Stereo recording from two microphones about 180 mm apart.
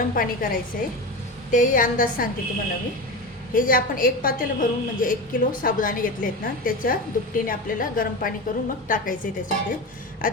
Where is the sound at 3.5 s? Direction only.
50° left (ahead or behind).